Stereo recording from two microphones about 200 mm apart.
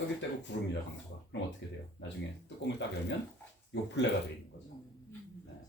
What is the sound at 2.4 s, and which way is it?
Speech, 60° left (ahead or behind).